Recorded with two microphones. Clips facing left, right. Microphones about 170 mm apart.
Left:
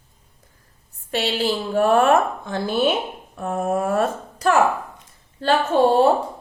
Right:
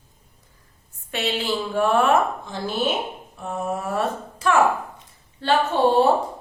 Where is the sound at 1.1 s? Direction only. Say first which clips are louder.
Left 3 dB; 35° left (ahead or behind).